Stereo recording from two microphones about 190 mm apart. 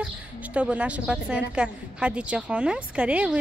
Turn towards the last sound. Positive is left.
turn(degrees=-5)  # may be behind; listen again after turning